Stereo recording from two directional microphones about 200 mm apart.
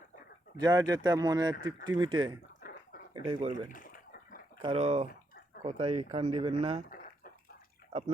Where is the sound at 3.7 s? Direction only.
45° left (ahead or behind).